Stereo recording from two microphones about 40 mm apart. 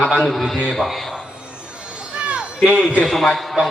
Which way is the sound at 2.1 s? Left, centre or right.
Right.